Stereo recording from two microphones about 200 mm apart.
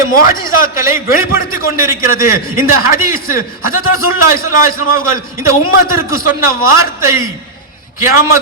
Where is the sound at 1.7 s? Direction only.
15° right (ahead or behind).